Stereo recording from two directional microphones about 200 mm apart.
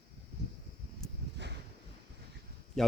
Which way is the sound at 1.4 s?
60° right (ahead or behind).